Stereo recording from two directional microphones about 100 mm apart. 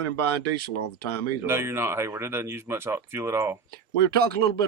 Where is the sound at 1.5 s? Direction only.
25° right (ahead or behind).